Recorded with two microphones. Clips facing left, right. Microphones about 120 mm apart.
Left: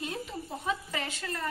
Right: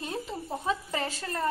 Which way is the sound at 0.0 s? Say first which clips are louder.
Right 2 dB; 30° right (ahead or behind).